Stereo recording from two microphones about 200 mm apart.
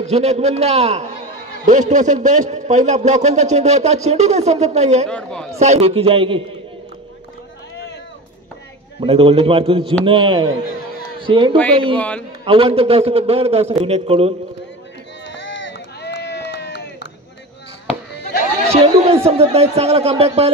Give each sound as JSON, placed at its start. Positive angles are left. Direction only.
{"t": 0.0, "sound": "a man's voice", "side_deg": -35}
{"t": 5.0, "sound": "speech", "side_deg": 5}
{"t": 5.6, "sound": "a man's voice", "side_deg": -30}
{"t": 9.0, "sound": "a man's voice", "side_deg": -25}
{"t": 15.2, "sound": "run", "side_deg": 65}
{"t": 18.7, "sound": "chatter", "side_deg": -30}
{"t": 19.2, "sound": "a man's voice", "side_deg": -30}